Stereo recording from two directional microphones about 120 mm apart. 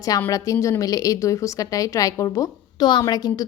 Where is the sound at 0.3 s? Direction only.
30° left (ahead or behind).